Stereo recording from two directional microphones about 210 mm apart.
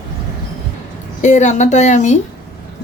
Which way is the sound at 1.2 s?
35° left (ahead or behind).